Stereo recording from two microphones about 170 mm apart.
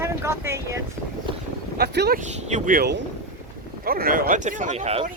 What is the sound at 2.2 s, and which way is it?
Speech, 45° right (ahead or behind).